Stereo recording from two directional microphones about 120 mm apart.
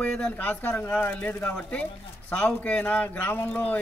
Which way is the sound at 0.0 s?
10° left (ahead or behind).